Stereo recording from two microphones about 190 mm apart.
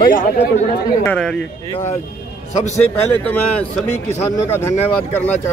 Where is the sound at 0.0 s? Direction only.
45° left (ahead or behind).